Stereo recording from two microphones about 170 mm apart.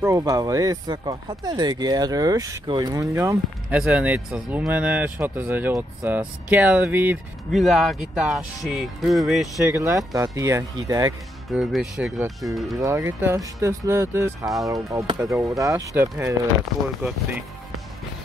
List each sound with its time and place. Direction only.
0.0 s speech: 20° right (ahead or behind)
3.7 s speech: 5° right (ahead or behind)
9.7 s speech: 15° right (ahead or behind)
11.5 s speech: 5° right (ahead or behind)
12.8 s speech: 15° right (ahead or behind)